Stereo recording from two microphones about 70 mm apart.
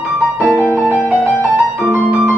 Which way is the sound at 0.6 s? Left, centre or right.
Right.